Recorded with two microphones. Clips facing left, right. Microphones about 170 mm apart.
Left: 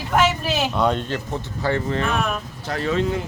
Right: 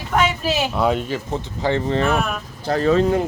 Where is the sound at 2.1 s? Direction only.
5° right (ahead or behind).